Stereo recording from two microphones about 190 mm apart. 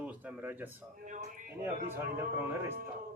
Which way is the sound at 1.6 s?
10° right (ahead or behind).